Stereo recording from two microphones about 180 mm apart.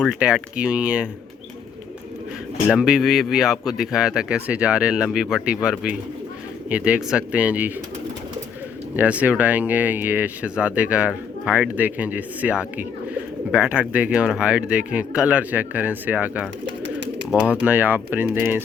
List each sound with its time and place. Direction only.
0.0 s speech: 5° right (ahead or behind)
2.6 s speech: 5° right (ahead or behind)
9.0 s speech: 10° right (ahead or behind)
16.8 s bird: 90° right
17.3 s speech: 5° right (ahead or behind)